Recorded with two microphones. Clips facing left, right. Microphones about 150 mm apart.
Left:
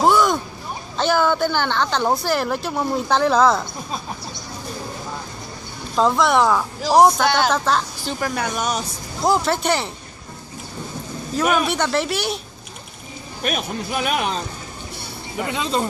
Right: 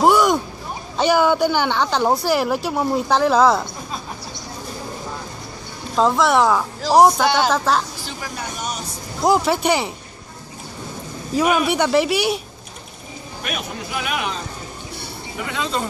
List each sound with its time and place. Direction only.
0.0 s a sound: 10° right (ahead or behind)
0.9 s speech: 10° right (ahead or behind)
5.9 s speech: centre (ahead or behind)
8.2 s speech: 75° left (ahead or behind)
9.2 s speech: 10° right (ahead or behind)
11.3 s speech: 10° right (ahead or behind)
13.5 s speech: 40° left (ahead or behind)
15.5 s speech: 20° left (ahead or behind)